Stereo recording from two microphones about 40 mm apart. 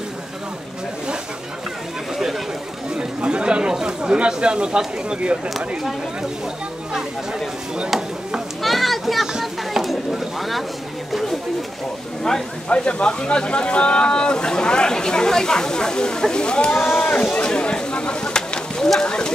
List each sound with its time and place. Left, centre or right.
3.2 s a sound: right
4.3 s speech: right
8.6 s children playing: centre
9.4 s speech: centre
12.2 s speech: centre
12.6 s speech: left
17.2 s a sound: left
19.0 s speech: left